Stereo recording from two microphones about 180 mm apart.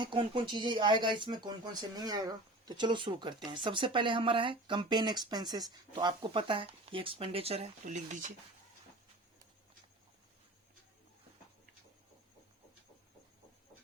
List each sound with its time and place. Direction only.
0.0 s speech: 25° right (ahead or behind); by 8.3 s 45° right (ahead or behind)